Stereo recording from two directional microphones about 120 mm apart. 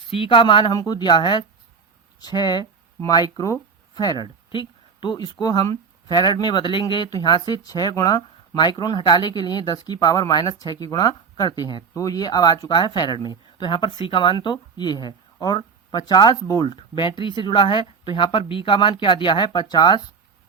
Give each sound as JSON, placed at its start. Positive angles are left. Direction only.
{"t": 0.1, "sound": "speech", "side_deg": 45}
{"t": 16.7, "sound": "speech", "side_deg": 45}